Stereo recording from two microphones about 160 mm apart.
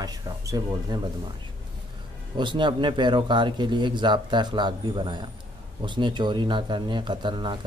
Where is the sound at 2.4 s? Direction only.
30° right (ahead or behind).